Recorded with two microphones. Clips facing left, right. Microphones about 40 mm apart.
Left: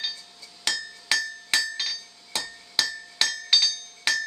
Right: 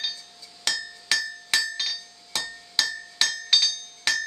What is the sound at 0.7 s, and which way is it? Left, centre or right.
Hammer, centre.